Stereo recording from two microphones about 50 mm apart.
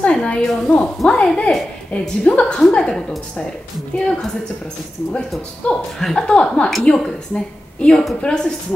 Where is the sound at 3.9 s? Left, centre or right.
Centre.